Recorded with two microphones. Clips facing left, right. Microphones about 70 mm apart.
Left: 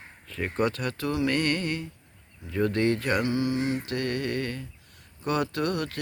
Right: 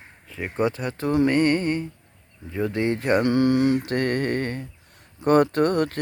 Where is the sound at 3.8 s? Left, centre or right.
Right.